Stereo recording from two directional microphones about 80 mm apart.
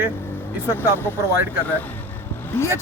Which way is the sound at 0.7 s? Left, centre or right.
Left.